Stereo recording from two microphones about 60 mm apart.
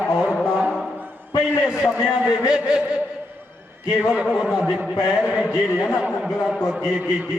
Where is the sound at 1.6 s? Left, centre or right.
Centre.